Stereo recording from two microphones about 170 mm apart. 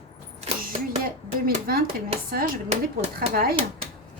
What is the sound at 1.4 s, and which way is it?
Speech, 60° right (ahead or behind).